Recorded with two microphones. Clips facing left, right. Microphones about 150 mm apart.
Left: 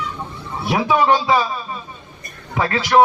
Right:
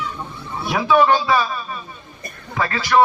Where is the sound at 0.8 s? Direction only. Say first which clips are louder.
Right 1 dB; 15° left (ahead or behind).